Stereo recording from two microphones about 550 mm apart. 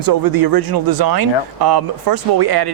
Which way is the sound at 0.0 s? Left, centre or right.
Right.